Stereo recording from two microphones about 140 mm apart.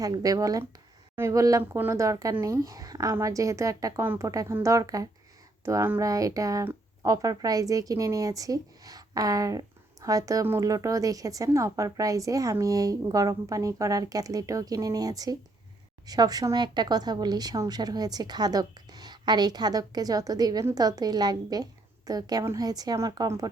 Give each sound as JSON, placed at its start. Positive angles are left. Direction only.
{"t": 0.0, "sound": "speech", "side_deg": -25}